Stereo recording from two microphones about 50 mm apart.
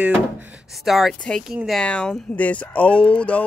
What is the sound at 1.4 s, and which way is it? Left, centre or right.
Speech, centre.